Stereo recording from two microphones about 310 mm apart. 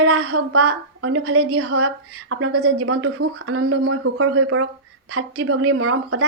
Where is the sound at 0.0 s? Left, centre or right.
Right.